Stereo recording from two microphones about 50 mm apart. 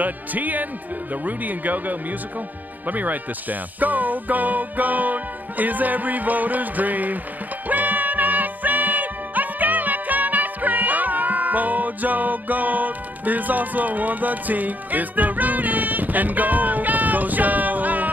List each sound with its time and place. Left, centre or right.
0.0 s speech: right
7.6 s music: right